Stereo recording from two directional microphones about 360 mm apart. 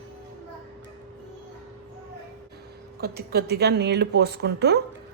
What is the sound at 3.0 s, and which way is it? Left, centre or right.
A woman's voice, right.